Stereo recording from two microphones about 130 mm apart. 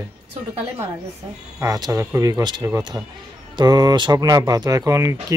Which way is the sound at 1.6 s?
25° right (ahead or behind).